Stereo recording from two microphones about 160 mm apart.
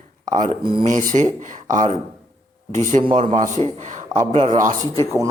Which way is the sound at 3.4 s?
50° right (ahead or behind).